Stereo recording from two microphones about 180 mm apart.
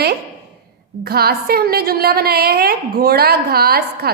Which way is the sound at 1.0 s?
60° right (ahead or behind).